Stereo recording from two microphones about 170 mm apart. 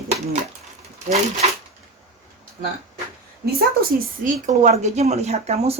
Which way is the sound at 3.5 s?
60° right (ahead or behind).